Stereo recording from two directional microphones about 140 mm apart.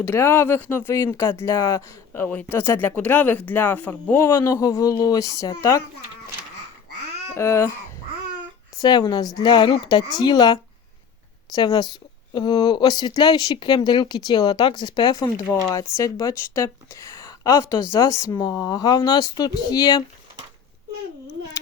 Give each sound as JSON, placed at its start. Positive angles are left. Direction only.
{"t": 0.0, "sound": "speech", "side_deg": 15}
{"t": 7.3, "sound": "speech", "side_deg": 20}
{"t": 8.8, "sound": "speech", "side_deg": 30}